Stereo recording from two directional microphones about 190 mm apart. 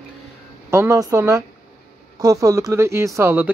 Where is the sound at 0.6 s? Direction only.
15° right (ahead or behind).